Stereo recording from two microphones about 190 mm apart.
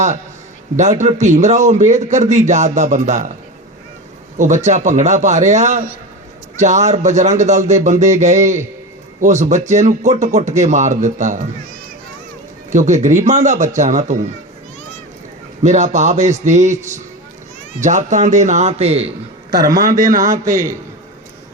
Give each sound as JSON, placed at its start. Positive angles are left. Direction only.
{"t": 0.8, "sound": "speech", "side_deg": -40}
{"t": 4.4, "sound": "speech", "side_deg": -40}
{"t": 12.7, "sound": "speech", "side_deg": -40}
{"t": 15.6, "sound": "speech", "side_deg": -40}
{"t": 19.5, "sound": "a man's voice", "side_deg": -20}